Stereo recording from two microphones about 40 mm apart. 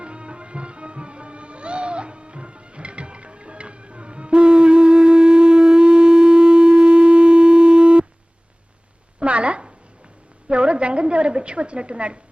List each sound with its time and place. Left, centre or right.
0.0 s music: right
9.2 s a sound: right
10.5 s a woman's voice: right